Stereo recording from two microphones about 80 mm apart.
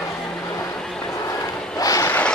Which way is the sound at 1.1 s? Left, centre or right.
Left.